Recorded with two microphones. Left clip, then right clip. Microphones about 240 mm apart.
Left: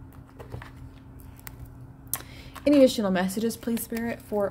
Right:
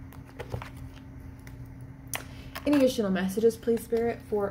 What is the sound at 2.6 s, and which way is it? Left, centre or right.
A woman's voice, left.